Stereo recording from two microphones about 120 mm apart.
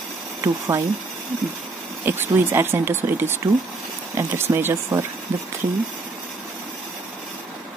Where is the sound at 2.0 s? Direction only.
20° right (ahead or behind).